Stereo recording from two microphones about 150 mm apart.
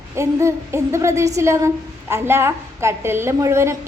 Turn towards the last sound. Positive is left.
turn(degrees=-20)  # may be behind; listen again after turning